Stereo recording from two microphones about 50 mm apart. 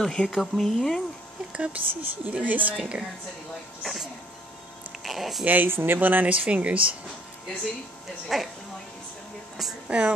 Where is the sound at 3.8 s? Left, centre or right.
Centre.